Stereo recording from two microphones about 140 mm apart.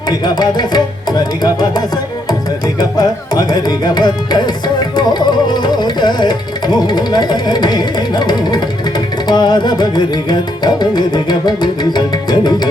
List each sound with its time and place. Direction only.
0.1 s music: 30° left (ahead or behind)